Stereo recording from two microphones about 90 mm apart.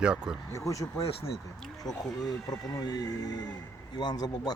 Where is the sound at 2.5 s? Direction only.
45° left (ahead or behind).